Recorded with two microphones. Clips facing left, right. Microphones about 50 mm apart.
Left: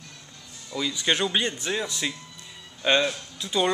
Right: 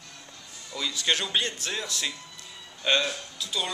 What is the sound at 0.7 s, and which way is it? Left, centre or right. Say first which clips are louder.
Speech: left 3 dB; centre.